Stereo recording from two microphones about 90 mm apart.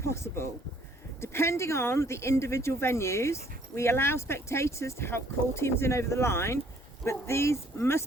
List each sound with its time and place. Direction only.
0.0 s speech: 30° left (ahead or behind)